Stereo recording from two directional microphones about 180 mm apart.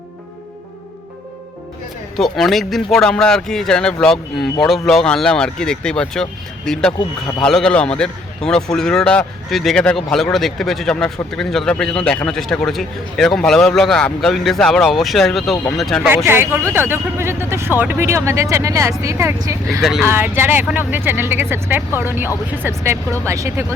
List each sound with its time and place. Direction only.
2.1 s a man's voice: centre (ahead or behind)
16.0 s speech: 10° right (ahead or behind)
19.8 s a man's voice: 5° right (ahead or behind)